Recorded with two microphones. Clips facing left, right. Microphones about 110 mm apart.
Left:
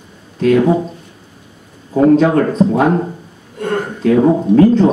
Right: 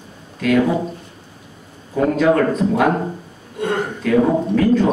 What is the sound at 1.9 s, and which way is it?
Speech, 30° left (ahead or behind).